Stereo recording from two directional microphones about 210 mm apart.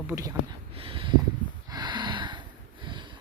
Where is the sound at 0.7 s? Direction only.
25° right (ahead or behind).